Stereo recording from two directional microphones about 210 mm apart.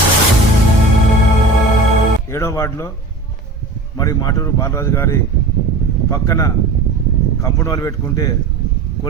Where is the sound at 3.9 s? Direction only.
15° left (ahead or behind).